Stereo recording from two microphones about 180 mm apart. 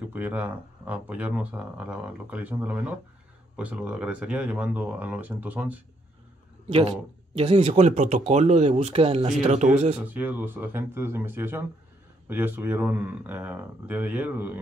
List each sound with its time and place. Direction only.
0.1 s speech: 10° right (ahead or behind)
6.7 s speech: 30° right (ahead or behind)
10.0 s speech: 10° right (ahead or behind)